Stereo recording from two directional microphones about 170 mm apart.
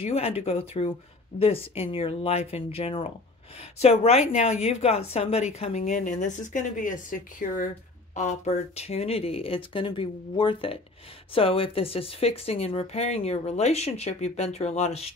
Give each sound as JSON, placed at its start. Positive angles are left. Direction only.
{"t": 0.0, "sound": "a woman's voice", "side_deg": 35}